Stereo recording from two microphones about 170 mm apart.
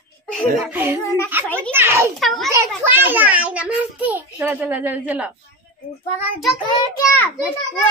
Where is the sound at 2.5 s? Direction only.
15° right (ahead or behind).